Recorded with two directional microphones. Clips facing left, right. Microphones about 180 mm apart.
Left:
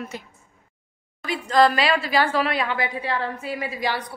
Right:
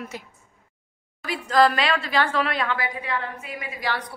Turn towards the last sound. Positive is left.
turn(degrees=35)  # may be behind; listen again after turning